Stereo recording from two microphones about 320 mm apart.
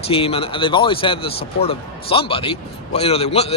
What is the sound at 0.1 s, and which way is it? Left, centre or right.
A man's voice, centre.